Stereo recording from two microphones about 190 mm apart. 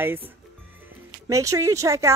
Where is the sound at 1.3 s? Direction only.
15° right (ahead or behind).